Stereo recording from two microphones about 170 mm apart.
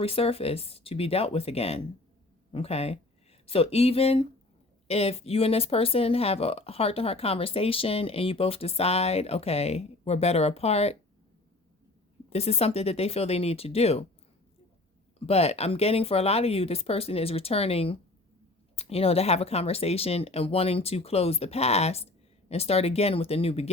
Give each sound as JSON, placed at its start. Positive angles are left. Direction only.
{"t": 0.0, "sound": "speech", "side_deg": 35}
{"t": 12.3, "sound": "speech", "side_deg": 35}
{"t": 15.3, "sound": "speech", "side_deg": 35}